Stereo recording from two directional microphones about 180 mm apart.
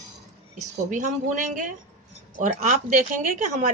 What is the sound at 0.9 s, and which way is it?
A woman's voice, 45° right (ahead or behind).